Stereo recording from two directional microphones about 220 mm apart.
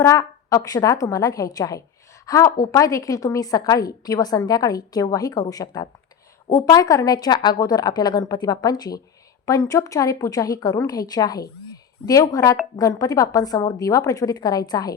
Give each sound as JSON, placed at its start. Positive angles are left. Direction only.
{"t": 0.0, "sound": "a woman's voice", "side_deg": 15}